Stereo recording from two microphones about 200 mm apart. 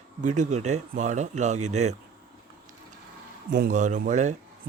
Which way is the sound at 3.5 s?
40° right (ahead or behind).